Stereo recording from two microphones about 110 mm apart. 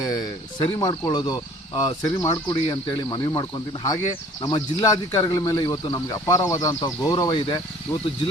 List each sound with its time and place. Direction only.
0.0 s a sound: 35° left (ahead or behind)
0.6 s speech: 55° left (ahead or behind)
0.9 s speech: 40° left (ahead or behind)
4.4 s speech: 35° left (ahead or behind)